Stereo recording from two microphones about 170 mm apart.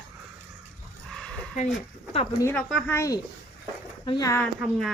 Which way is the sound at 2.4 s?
15° left (ahead or behind).